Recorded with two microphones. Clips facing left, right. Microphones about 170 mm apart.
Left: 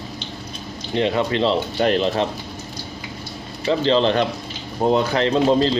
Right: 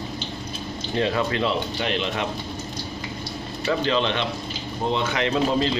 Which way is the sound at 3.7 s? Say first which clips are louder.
Left 5 dB; 30° left (ahead or behind).